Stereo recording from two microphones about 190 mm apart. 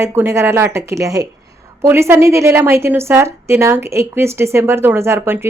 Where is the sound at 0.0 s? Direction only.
15° right (ahead or behind).